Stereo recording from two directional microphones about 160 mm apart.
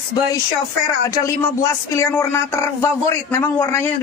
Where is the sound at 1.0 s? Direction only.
20° left (ahead or behind).